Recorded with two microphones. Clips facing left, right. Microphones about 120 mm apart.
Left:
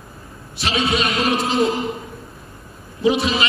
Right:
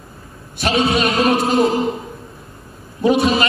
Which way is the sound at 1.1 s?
60° right (ahead or behind).